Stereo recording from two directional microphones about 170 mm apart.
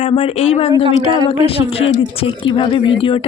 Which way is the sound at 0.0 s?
35° left (ahead or behind).